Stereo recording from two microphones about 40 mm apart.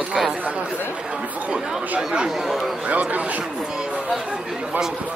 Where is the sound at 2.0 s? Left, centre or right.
Centre.